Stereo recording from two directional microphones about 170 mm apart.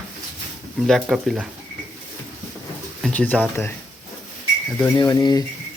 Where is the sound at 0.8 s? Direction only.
Centre (ahead or behind).